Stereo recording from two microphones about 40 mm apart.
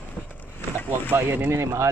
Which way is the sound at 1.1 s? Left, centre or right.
Right.